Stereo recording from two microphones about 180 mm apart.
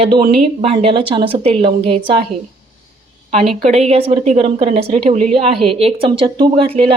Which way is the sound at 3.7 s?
35° right (ahead or behind).